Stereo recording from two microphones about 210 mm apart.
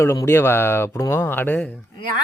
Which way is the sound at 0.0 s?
15° left (ahead or behind).